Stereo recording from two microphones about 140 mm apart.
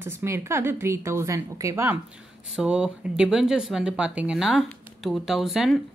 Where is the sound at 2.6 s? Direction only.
5° right (ahead or behind).